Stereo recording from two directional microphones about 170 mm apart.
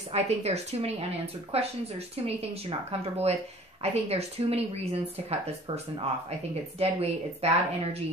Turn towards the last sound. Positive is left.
turn(degrees=-35)  # may be behind; listen again after turning